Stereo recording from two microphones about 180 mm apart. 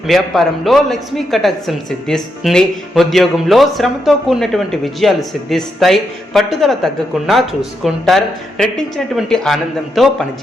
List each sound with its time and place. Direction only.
0.1 s a woman's voice: centre (ahead or behind)